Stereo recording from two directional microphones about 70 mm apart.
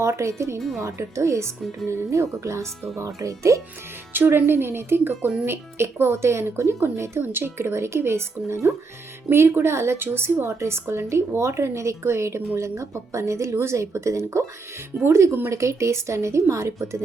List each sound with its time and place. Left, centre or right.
0.0 s speech: right
4.1 s a woman's voice: right